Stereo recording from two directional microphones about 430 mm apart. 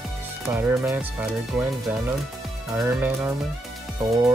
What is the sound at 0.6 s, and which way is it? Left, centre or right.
Speech, centre.